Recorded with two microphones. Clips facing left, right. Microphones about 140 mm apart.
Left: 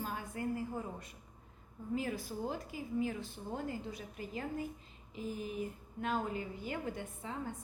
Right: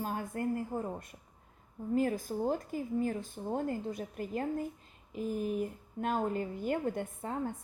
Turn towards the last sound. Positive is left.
turn(degrees=-50)  # may be behind; listen again after turning